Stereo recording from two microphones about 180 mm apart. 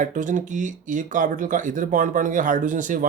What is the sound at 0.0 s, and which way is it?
Speech, 45° right (ahead or behind).